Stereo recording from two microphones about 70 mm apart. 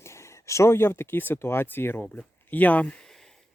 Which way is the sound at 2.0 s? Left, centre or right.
Centre.